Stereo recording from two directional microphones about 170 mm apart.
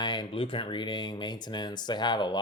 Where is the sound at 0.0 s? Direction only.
25° left (ahead or behind).